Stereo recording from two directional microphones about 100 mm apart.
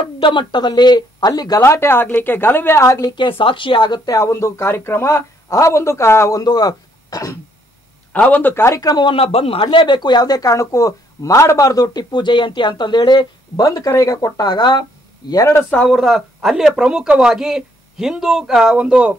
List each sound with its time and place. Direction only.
0.0 s speech: 55° left (ahead or behind); by 1.6 s 40° left (ahead or behind)
1.6 s speech: 25° left (ahead or behind)
3.2 s speech: 60° left (ahead or behind); by 6.4 s 30° left (ahead or behind)
6.4 s speech: 40° left (ahead or behind)
8.1 s speech: 15° left (ahead or behind); by 8.9 s 30° left (ahead or behind)
9.1 s speech: 75° left (ahead or behind); by 13.7 s 45° left (ahead or behind)
13.7 s speech: 35° left (ahead or behind)
15.9 s speech: centre (ahead or behind)